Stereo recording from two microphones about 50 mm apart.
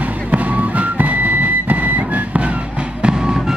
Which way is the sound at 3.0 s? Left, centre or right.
Centre.